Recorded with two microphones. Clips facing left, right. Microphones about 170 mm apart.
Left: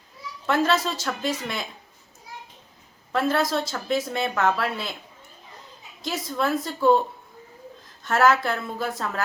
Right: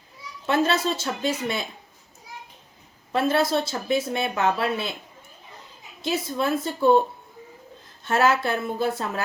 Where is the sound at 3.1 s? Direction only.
25° right (ahead or behind).